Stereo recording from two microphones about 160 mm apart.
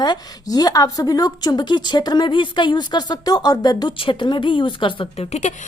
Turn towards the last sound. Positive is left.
turn(degrees=40)  # may be behind; listen again after turning